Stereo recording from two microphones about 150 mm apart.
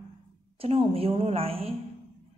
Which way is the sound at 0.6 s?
40° right (ahead or behind).